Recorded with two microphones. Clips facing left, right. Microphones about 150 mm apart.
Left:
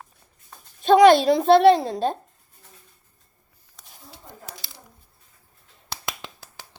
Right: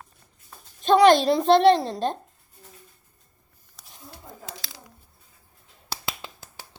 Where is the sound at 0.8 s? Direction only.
10° left (ahead or behind).